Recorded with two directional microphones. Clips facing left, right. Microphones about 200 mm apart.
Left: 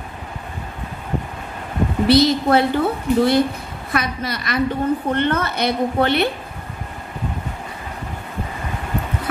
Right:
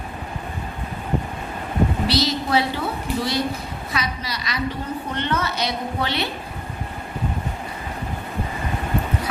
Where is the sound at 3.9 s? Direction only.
55° left (ahead or behind).